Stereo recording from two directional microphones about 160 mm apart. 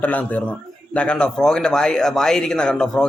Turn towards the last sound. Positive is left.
turn(degrees=5)  # may be behind; listen again after turning